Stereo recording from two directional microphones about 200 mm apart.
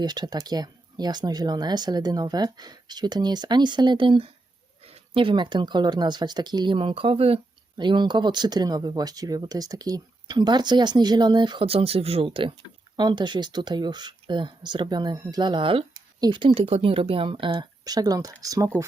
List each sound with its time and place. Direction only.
0.0 s speech: 20° right (ahead or behind)